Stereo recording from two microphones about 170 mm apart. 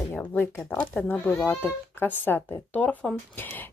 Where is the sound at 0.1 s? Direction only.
10° left (ahead or behind).